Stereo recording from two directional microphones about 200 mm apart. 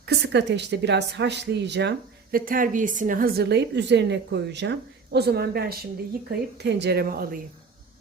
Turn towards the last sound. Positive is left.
turn(degrees=-45)  # may be behind; listen again after turning